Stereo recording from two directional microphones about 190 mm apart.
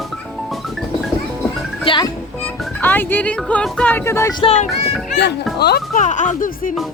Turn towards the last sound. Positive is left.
turn(degrees=45)  # may be behind; listen again after turning